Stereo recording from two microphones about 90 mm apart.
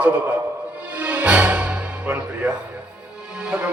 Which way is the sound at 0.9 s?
15° right (ahead or behind).